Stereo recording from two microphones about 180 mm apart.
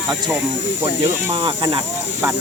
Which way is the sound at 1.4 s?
25° right (ahead or behind).